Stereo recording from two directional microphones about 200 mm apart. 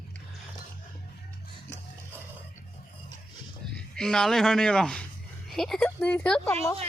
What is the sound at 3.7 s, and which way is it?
A woman's voice, 5° left (ahead or behind).